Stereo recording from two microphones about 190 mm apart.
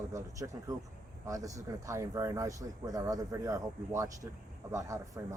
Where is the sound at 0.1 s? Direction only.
15° right (ahead or behind).